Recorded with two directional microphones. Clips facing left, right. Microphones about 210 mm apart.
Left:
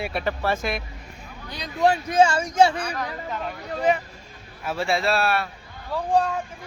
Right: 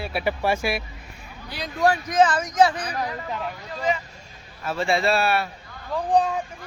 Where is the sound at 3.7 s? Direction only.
55° left (ahead or behind).